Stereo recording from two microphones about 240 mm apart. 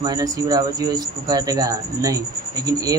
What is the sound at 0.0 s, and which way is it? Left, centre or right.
Speech, centre.